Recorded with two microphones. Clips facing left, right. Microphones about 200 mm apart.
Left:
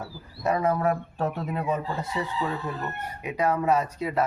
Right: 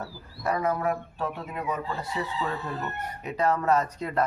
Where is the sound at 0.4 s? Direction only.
25° left (ahead or behind).